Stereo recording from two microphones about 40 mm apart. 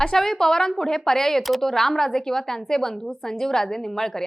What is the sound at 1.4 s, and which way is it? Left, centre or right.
Speech, centre.